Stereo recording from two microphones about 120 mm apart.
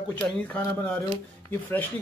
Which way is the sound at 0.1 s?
10° left (ahead or behind).